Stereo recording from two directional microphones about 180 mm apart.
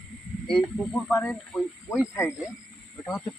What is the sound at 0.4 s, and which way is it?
Speech, 5° left (ahead or behind).